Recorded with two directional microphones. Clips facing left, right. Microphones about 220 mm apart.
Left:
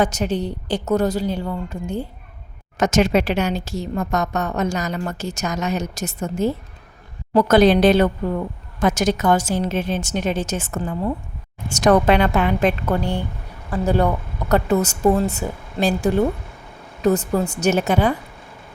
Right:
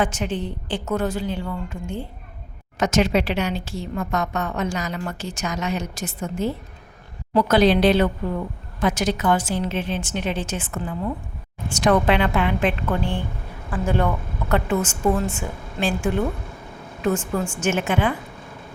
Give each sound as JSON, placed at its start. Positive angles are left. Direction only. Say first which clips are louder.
{"t": 0.0, "sound": "a woman's voice", "louder": "left 4 dB", "side_deg": 40}